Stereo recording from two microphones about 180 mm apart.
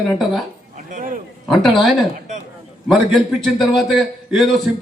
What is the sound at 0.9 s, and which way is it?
Speech, 45° right (ahead or behind).